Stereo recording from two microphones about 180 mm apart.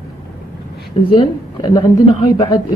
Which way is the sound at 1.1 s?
20° left (ahead or behind).